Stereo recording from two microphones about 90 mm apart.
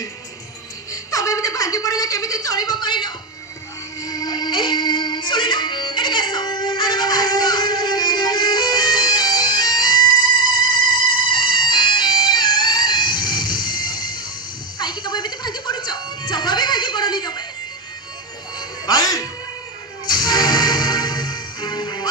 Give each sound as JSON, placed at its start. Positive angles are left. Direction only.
{"t": 1.1, "sound": "speech", "side_deg": 35}
{"t": 4.0, "sound": "music", "side_deg": 45}
{"t": 18.9, "sound": "music", "side_deg": 45}